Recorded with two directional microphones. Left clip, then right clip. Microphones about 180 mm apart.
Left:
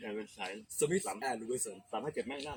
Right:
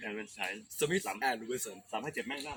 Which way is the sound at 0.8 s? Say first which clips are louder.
Even; 20° left (ahead or behind).